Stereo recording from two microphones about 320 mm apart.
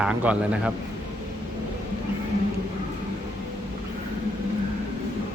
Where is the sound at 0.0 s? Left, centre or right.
Centre.